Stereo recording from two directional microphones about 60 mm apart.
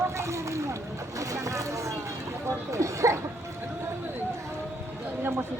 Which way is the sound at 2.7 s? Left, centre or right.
Right.